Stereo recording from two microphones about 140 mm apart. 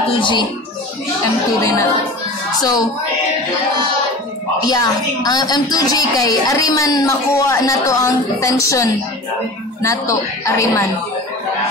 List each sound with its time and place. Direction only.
0.2 s speech: 35° left (ahead or behind)
1.6 s a woman's voice: 20° left (ahead or behind)
4.6 s a woman's voice: 25° left (ahead or behind)